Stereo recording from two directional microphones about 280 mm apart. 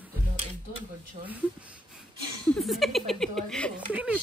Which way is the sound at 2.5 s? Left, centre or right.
Centre.